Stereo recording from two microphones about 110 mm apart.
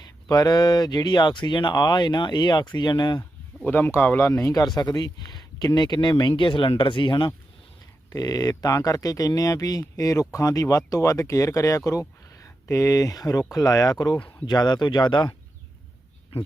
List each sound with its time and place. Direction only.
0.0 s speech: 35° left (ahead or behind)
3.6 s speech: 15° left (ahead or behind)
4.3 s speech: 30° left (ahead or behind); by 7.3 s 45° left (ahead or behind)
8.1 s speech: 35° left (ahead or behind)
14.2 s speech: 15° left (ahead or behind)
14.4 s speech: 40° left (ahead or behind)